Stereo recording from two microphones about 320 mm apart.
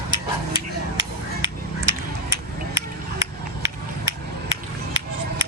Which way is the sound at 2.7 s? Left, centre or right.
Centre.